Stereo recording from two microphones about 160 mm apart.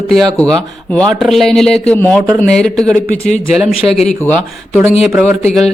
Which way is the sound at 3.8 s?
20° right (ahead or behind).